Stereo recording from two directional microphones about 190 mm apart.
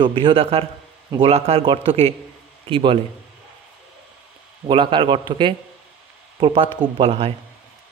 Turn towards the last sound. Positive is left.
turn(degrees=-30)  # may be behind; listen again after turning